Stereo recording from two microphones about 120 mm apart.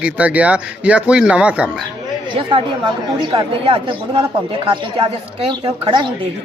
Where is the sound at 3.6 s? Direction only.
50° right (ahead or behind).